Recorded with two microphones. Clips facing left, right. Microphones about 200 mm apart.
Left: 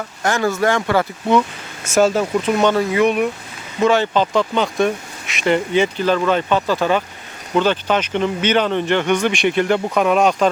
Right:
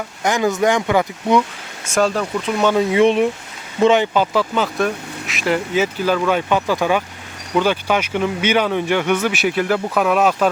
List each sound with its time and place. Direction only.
0.2 s speech: 15° right (ahead or behind)
1.9 s speech: 5° left (ahead or behind)
2.7 s speech: 25° right (ahead or behind); by 10.5 s 5° right (ahead or behind)